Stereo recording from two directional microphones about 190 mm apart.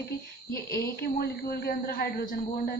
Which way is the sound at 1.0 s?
55° left (ahead or behind).